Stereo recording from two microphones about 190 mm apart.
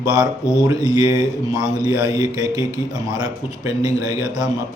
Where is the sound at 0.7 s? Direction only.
20° right (ahead or behind).